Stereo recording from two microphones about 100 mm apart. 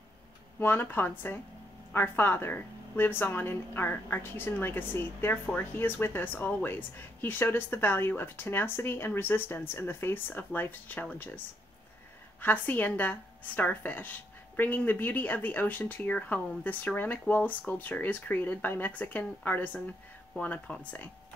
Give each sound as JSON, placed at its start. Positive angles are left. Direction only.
{"t": 0.6, "sound": "a woman's voice", "side_deg": 20}